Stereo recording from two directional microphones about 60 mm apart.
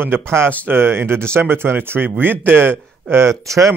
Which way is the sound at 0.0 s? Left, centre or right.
Right.